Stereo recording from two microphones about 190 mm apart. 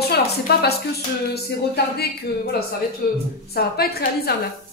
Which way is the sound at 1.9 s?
55° left (ahead or behind).